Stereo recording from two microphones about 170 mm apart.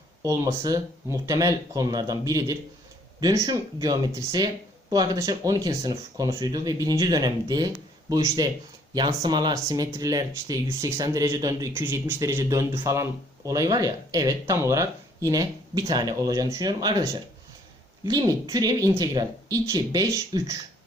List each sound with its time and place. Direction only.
0.2 s speech: 20° right (ahead or behind)